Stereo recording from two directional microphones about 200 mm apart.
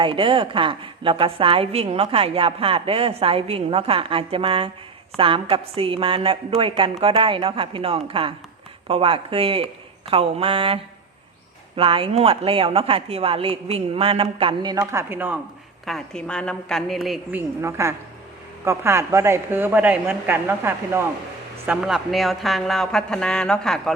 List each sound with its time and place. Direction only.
0.0 s a woman's voice: 25° right (ahead or behind)
11.8 s a woman's voice: 25° right (ahead or behind); by 15.4 s 10° right (ahead or behind)
15.9 s speech: 5° left (ahead or behind)
17.6 s a man's voice: 15° right (ahead or behind); by 23.9 s centre (ahead or behind)